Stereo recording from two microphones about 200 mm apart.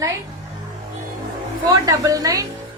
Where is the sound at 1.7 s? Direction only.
15° right (ahead or behind).